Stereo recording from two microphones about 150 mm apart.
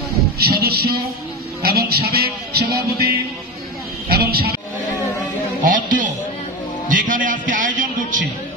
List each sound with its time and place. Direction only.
0.4 s a sound: 90° right
1.6 s a man's voice: 90° right
4.1 s a man's voice: 90° right
5.6 s speech: 60° right (ahead or behind)
6.9 s music: 60° right (ahead or behind)